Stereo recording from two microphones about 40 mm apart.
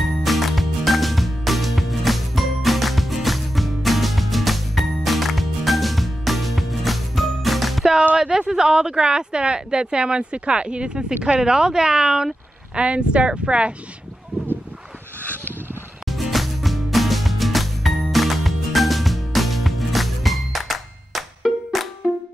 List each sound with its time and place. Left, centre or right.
0.2 s music: centre
8.2 s speech: centre
12.8 s speech: right
15.2 s a sound: left
16.1 s music: centre